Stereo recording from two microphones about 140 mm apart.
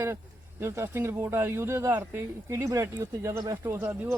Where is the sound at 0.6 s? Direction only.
20° right (ahead or behind).